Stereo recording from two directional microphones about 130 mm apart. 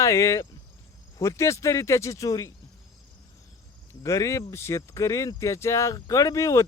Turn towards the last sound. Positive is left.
turn(degrees=25)  # may be behind; listen again after turning